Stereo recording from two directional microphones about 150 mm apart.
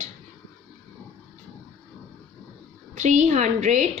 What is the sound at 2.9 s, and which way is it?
Speech, 55° right (ahead or behind).